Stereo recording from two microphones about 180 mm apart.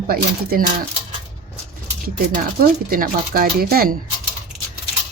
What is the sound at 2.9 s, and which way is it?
A woman's voice, 55° right (ahead or behind).